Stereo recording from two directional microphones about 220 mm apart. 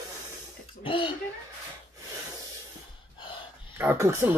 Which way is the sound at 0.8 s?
25° left (ahead or behind).